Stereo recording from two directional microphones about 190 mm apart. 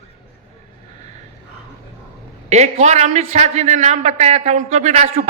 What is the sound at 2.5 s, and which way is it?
A man's voice, 35° right (ahead or behind).